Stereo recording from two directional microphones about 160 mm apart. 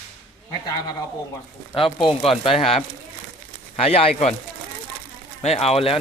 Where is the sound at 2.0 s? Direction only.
35° left (ahead or behind).